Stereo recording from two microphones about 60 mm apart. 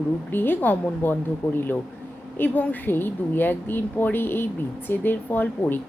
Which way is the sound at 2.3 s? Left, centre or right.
Left.